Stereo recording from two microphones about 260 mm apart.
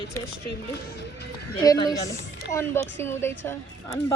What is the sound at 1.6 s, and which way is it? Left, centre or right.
A woman's voice, centre.